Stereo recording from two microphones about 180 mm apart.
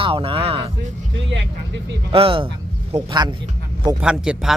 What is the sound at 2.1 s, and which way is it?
A man's voice, 30° right (ahead or behind).